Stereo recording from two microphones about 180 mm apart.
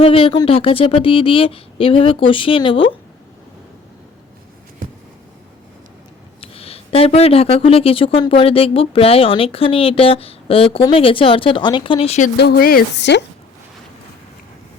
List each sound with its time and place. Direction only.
0.0 s speech: 30° left (ahead or behind)
6.4 s speech: 30° left (ahead or behind)
12.4 s a woman's voice: 60° left (ahead or behind); by 13.2 s 75° left (ahead or behind)